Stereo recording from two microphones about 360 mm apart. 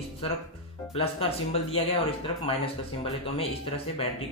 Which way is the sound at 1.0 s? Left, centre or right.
Centre.